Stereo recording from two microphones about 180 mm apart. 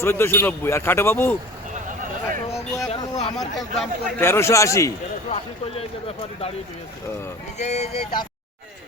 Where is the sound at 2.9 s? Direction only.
30° left (ahead or behind).